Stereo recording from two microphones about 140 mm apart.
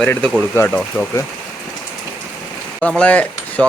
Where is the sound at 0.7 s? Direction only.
5° left (ahead or behind).